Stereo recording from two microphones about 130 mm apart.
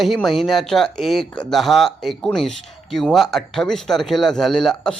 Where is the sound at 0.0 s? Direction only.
Centre (ahead or behind).